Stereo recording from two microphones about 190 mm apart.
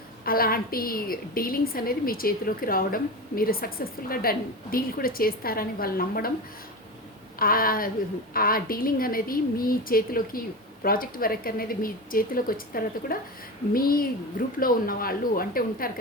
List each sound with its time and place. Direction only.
0.3 s a woman's voice: 50° left (ahead or behind)
7.3 s a woman's voice: 50° left (ahead or behind)